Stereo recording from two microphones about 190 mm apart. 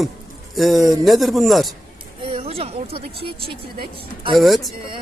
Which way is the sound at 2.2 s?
30° right (ahead or behind).